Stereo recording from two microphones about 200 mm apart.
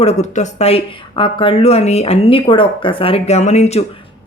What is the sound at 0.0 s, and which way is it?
Speech, 35° left (ahead or behind).